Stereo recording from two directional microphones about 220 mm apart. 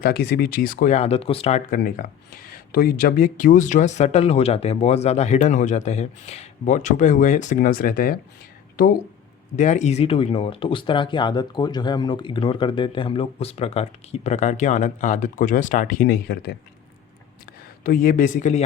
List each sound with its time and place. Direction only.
0.0 s speech: 45° left (ahead or behind)
9.6 s speech: 35° left (ahead or behind); by 16.6 s 50° left (ahead or behind)
17.8 s speech: 40° left (ahead or behind)